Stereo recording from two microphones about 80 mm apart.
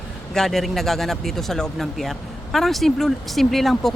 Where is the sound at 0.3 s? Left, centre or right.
Centre.